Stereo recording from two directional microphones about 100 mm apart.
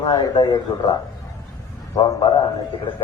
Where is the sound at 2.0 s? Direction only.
55° left (ahead or behind).